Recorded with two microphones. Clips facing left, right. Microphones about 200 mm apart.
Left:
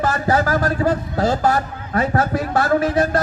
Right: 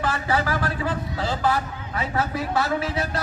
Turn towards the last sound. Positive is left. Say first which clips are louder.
# left 9 dB
turn(degrees=50)  # may be behind; listen again after turning